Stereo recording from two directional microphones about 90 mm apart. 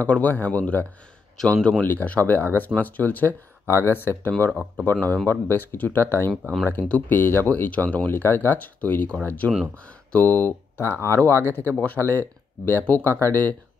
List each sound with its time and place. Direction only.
0.0 s speech: 20° left (ahead or behind)
4.5 s speech: 5° right (ahead or behind)
5.0 s speech: 20° left (ahead or behind)